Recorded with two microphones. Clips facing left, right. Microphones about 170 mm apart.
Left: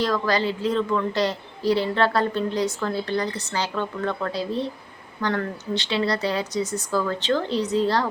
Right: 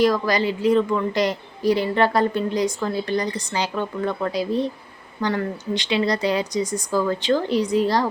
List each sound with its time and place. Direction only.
0.0 s a woman's voice: 10° right (ahead or behind)